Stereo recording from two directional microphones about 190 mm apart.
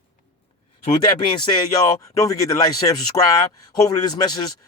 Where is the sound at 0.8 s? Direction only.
25° left (ahead or behind).